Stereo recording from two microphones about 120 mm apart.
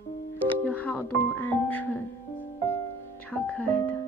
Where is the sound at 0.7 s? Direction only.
10° left (ahead or behind).